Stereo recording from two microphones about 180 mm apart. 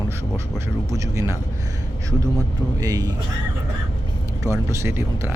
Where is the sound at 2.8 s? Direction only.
20° right (ahead or behind).